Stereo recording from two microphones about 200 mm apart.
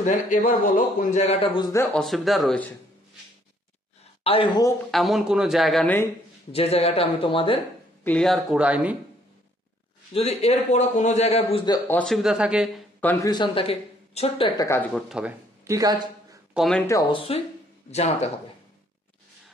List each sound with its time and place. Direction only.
0.0 s a man's voice: 40° left (ahead or behind)
2.0 s speech: centre (ahead or behind)
4.2 s speech: 30° left (ahead or behind)
4.9 s speech: centre (ahead or behind)
6.5 s speech: 30° left (ahead or behind)
8.0 s speech: 5° left (ahead or behind)
10.1 s a man's voice: 30° left (ahead or behind)
11.9 s speech: 5° left (ahead or behind)
13.0 s speech: 15° left (ahead or behind); by 14.5 s 30° left (ahead or behind)
14.6 s speech: 15° left (ahead or behind)
15.0 s speech: 5° right (ahead or behind)
16.5 s speech: centre (ahead or behind)
17.1 s a man's voice: 30° left (ahead or behind)